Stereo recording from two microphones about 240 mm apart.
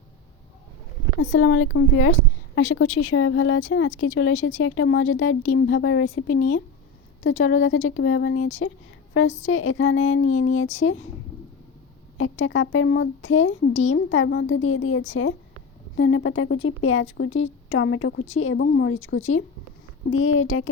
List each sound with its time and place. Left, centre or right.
1.2 s speech: left
12.1 s speech: left